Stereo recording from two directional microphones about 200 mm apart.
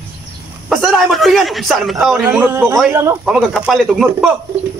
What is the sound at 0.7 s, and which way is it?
A man's voice, centre (ahead or behind).